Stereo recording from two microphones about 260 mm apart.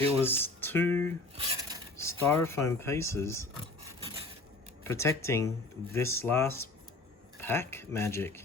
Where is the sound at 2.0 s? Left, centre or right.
Centre.